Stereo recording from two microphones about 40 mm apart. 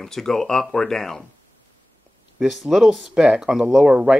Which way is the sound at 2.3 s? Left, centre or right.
Centre.